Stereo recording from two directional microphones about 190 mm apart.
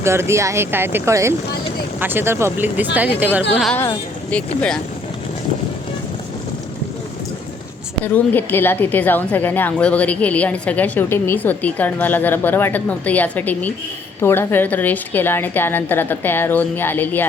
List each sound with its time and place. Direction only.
0.0 s speech: 15° right (ahead or behind)
3.5 s a woman's voice: 5° left (ahead or behind)
8.0 s a woman's voice: 10° left (ahead or behind)